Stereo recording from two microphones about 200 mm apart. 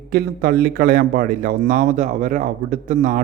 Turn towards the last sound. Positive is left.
turn(degrees=-40)  # may be behind; listen again after turning